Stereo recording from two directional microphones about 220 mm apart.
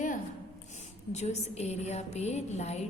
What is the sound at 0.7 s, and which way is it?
A woman's voice, 30° left (ahead or behind).